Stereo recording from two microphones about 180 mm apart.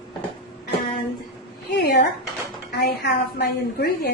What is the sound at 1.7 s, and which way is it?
A woman's voice, 60° left (ahead or behind).